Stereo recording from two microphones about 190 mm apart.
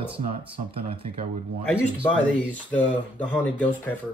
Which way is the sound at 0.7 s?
30° right (ahead or behind).